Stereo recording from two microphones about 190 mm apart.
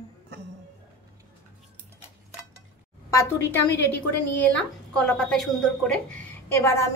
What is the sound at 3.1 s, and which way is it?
A woman's voice, 15° left (ahead or behind).